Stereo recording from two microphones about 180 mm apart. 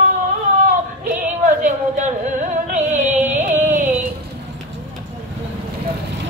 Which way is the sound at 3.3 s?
45° right (ahead or behind).